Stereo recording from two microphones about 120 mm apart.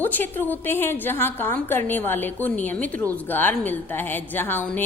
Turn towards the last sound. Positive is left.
turn(degrees=15)  # may be behind; listen again after turning